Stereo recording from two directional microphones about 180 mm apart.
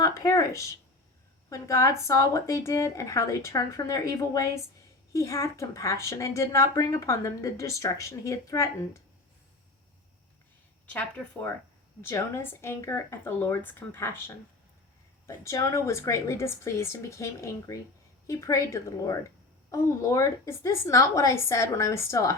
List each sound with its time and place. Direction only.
0.0 s speech: 20° left (ahead or behind)
10.8 s speech: 10° left (ahead or behind)